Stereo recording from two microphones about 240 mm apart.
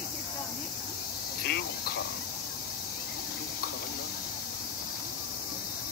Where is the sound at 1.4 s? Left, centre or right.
Left.